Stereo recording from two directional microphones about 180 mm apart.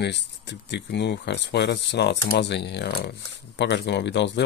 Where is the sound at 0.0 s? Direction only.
70° left (ahead or behind).